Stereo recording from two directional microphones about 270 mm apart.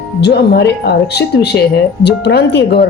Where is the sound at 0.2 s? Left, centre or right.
Left.